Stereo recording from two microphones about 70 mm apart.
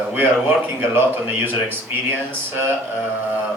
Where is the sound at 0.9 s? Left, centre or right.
Right.